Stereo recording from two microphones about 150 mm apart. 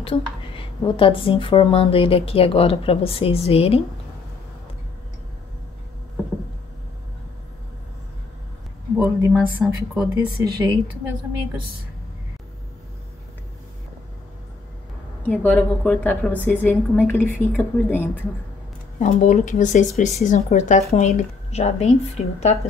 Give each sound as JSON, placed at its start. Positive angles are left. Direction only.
{"t": 0.0, "sound": "speech", "side_deg": 35}
{"t": 8.9, "sound": "speech", "side_deg": -15}
{"t": 10.4, "sound": "a woman's voice", "side_deg": -30}
{"t": 15.2, "sound": "a woman's voice", "side_deg": 10}
{"t": 18.9, "sound": "a woman's voice", "side_deg": 55}